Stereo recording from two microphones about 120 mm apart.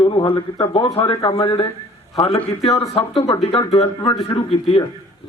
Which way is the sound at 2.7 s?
55° left (ahead or behind).